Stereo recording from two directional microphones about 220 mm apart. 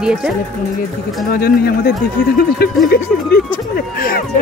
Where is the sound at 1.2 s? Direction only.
45° left (ahead or behind).